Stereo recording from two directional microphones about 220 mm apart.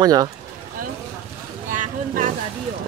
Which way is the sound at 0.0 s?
15° right (ahead or behind).